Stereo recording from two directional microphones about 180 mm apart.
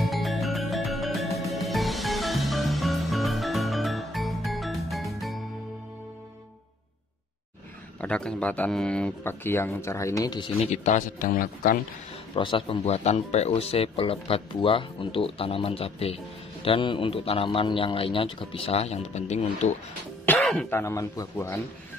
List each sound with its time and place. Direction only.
0.0 s music: centre (ahead or behind)
8.0 s speech: 5° left (ahead or behind); by 10.7 s 25° left (ahead or behind)
10.7 s speech: 40° left (ahead or behind)
12.4 s speech: 30° left (ahead or behind)
20.2 s speech: 10° left (ahead or behind)